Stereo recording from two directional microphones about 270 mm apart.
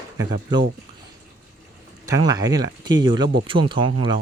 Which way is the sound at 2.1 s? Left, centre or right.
Centre.